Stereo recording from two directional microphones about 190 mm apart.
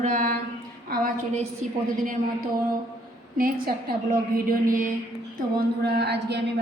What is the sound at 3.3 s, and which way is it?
Speech, 50° right (ahead or behind).